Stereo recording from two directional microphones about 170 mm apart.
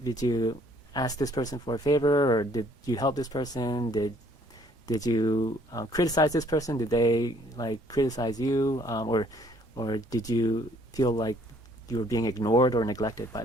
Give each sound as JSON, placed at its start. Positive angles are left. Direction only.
{"t": 0.0, "sound": "speech", "side_deg": 20}